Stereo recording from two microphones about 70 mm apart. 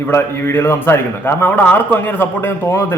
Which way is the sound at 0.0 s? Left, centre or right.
Left.